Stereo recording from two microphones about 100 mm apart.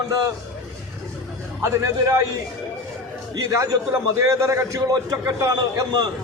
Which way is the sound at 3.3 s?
35° right (ahead or behind).